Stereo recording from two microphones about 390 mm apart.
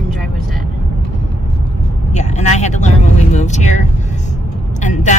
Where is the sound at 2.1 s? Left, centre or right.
Centre.